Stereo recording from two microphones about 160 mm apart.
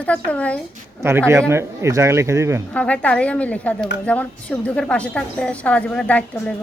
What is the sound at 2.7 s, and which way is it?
A woman's voice, 10° left (ahead or behind).